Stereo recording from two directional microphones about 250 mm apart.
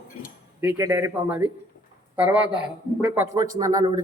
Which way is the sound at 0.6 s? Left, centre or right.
Centre.